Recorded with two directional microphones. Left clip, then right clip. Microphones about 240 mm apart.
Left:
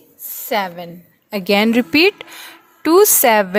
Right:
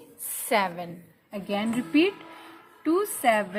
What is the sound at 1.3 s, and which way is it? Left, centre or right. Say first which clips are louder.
A woman's voice: left 14 dB; left.